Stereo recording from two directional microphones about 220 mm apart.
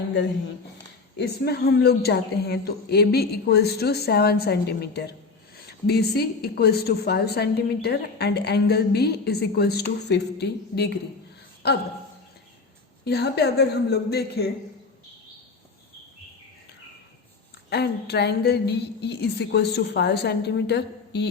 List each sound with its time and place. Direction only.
1.2 s a woman's voice: 45° left (ahead or behind)
13.1 s a woman's voice: 50° left (ahead or behind)
17.7 s a woman's voice: 50° left (ahead or behind)